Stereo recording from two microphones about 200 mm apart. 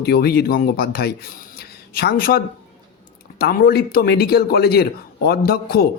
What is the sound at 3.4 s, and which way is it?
A man's voice, 50° left (ahead or behind).